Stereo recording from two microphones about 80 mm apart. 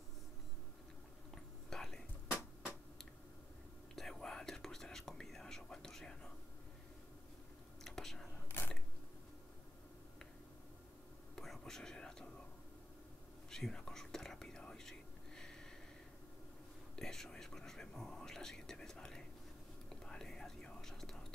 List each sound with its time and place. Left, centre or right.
1.3 s whispering: centre
3.9 s whispering: centre
7.8 s whispering: centre
8.5 s a sound: left
11.3 s whispering: centre
13.5 s whispering: centre
16.9 s whispering: centre